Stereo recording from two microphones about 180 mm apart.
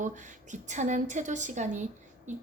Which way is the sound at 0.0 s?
45° right (ahead or behind).